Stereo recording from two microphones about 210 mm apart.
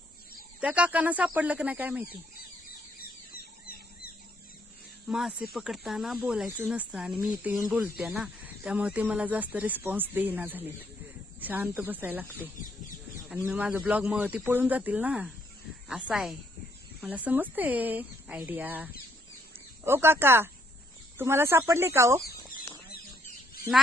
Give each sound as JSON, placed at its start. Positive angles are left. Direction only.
{"t": 0.6, "sound": "speech", "side_deg": -5}
{"t": 3.0, "sound": "a sound", "side_deg": 45}
{"t": 5.0, "sound": "speech", "side_deg": -5}